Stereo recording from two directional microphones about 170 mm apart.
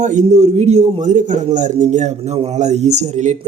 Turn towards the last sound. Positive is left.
turn(degrees=-45)  # may be behind; listen again after turning